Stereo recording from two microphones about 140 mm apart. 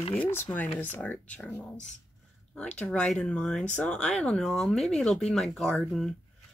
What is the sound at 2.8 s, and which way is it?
Speech, 5° left (ahead or behind).